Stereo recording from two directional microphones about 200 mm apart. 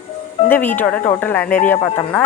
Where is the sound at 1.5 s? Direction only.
40° left (ahead or behind).